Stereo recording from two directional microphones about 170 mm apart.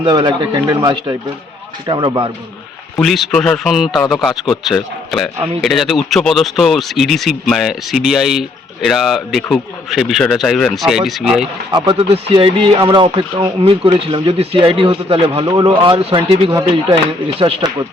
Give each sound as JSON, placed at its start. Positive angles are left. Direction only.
{"t": 0.0, "sound": "speech", "side_deg": -30}
{"t": 3.0, "sound": "speech", "side_deg": 0}
{"t": 11.7, "sound": "speech", "side_deg": -25}
{"t": 16.5, "sound": "speech", "side_deg": -20}